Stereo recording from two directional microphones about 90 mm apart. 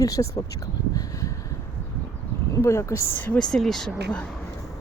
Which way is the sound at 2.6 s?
35° left (ahead or behind).